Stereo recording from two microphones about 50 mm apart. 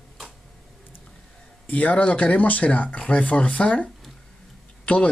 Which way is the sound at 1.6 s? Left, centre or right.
Left.